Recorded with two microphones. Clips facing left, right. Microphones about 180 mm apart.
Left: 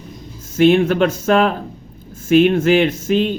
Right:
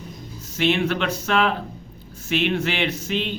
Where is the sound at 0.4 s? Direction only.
50° left (ahead or behind).